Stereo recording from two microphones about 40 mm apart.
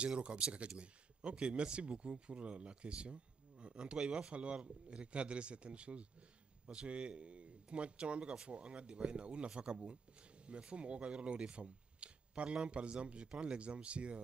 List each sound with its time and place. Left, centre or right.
0.0 s speech: right